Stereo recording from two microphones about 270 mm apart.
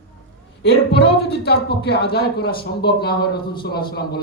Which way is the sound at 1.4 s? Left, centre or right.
Left.